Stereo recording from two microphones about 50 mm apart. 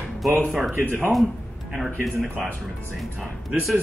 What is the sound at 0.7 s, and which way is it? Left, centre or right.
Speech, right.